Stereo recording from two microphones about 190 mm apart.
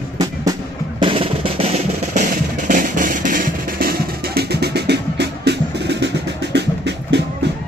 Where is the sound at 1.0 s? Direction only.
30° right (ahead or behind); by 7.5 s 65° right (ahead or behind).